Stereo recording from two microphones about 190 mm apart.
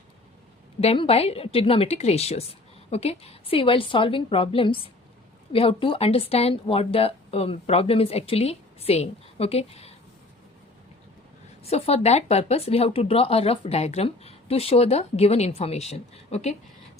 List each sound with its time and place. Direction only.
0.8 s a woman's voice: 30° left (ahead or behind)
11.6 s speech: 30° left (ahead or behind)